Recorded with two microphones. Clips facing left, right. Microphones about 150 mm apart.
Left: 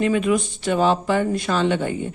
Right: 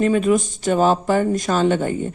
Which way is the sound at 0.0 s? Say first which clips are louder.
Right 3 dB; 40° right (ahead or behind).